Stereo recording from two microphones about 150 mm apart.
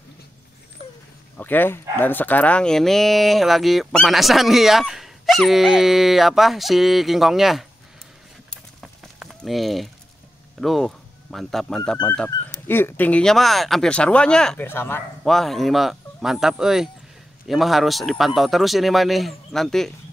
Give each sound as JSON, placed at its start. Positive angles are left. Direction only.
{"t": 1.3, "sound": "speech", "side_deg": 15}
{"t": 8.5, "sound": "typing", "side_deg": 0}
{"t": 10.6, "sound": "speech", "side_deg": 0}
{"t": 12.6, "sound": "speech", "side_deg": 15}
{"t": 14.7, "sound": "speech", "side_deg": 15}
{"t": 15.2, "sound": "speech", "side_deg": 0}